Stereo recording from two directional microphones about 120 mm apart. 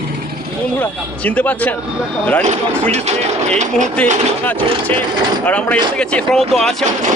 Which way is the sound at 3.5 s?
90° right.